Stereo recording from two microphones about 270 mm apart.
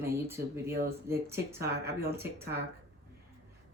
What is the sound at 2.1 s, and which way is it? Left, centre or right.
Speech, right.